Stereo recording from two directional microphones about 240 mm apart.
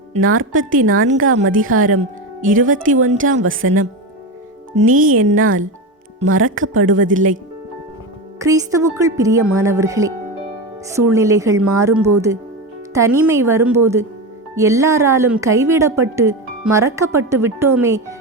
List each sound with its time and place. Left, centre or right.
0.2 s speech: right
3.2 s speech: right
4.7 s speech: right
5.1 s speech: right
8.4 s speech: centre